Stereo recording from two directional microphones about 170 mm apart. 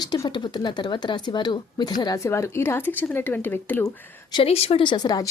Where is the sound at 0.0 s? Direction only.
25° left (ahead or behind).